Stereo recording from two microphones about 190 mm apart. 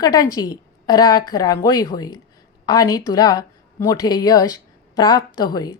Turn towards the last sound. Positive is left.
turn(degrees=20)  # may be behind; listen again after turning